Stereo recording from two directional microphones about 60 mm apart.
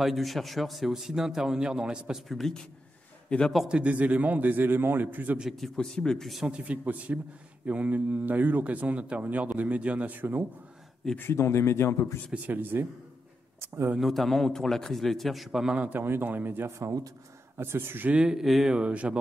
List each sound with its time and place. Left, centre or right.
0.0 s a man's voice: centre
2.2 s a man's voice: centre
3.6 s a man's voice: centre
5.6 s speech: centre
6.4 s a man's voice: centre
11.1 s speech: left
12.4 s a man's voice: right
13.9 s a man's voice: centre
15.7 s a man's voice: right
16.0 s a man's voice: right
16.7 s speech: right
17.6 s a man's voice: right
18.1 s a man's voice: centre
18.8 s a man's voice: centre